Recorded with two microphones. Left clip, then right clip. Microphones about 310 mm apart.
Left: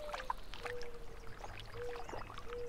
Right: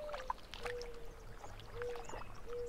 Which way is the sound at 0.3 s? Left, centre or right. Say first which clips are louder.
Even; centre.